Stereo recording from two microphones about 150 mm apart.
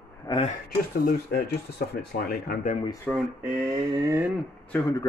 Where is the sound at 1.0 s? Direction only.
90° left; by 2.8 s 65° left (ahead or behind).